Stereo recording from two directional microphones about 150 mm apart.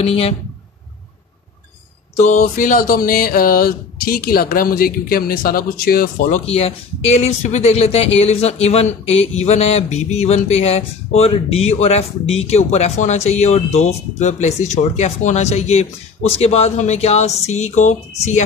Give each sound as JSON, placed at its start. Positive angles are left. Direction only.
{"t": 0.0, "sound": "speech", "side_deg": 40}
{"t": 2.3, "sound": "a sound", "side_deg": 60}
{"t": 6.4, "sound": "speech", "side_deg": 45}